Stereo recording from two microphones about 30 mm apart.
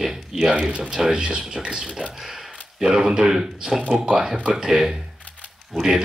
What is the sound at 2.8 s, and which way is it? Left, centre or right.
Speech, right.